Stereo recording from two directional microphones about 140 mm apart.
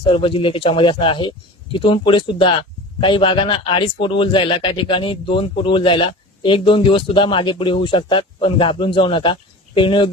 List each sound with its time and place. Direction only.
0.0 s speech: 35° left (ahead or behind)